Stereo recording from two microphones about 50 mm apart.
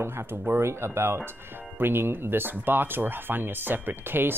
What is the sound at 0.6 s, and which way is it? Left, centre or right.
Speech, right.